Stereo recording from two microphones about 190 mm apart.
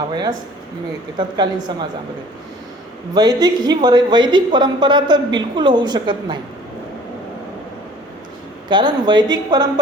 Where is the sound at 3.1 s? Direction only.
20° right (ahead or behind).